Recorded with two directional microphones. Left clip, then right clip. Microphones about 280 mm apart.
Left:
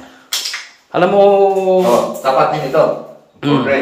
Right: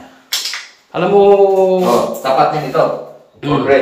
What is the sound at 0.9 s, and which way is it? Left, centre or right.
Speech, centre.